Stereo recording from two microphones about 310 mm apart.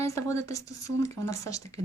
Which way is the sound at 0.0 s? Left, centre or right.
Centre.